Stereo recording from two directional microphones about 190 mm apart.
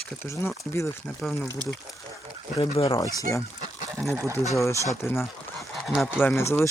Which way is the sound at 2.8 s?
30° left (ahead or behind).